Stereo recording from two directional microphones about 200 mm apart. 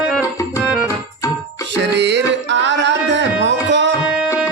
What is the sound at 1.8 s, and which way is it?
Music, 60° right (ahead or behind).